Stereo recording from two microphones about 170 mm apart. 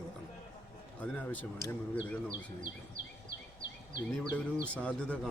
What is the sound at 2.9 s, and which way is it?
Insect, 50° right (ahead or behind).